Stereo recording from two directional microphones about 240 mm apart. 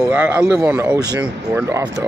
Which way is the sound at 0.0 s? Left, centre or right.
Centre.